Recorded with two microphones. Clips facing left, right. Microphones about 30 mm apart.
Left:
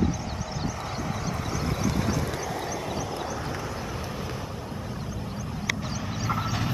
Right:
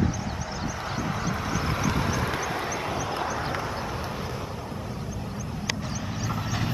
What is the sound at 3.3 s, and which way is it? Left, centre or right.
Horse, right.